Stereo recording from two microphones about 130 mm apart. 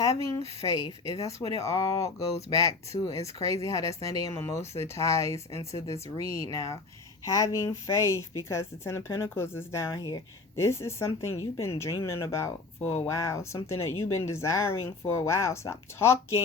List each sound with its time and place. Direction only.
0.0 s speech: 25° left (ahead or behind)